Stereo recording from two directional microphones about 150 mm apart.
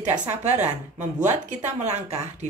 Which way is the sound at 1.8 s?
50° right (ahead or behind).